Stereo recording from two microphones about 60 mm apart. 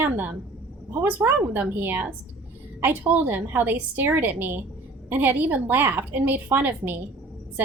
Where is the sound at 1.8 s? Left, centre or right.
Right.